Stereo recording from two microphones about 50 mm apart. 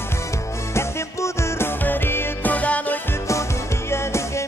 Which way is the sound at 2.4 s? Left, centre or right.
Left.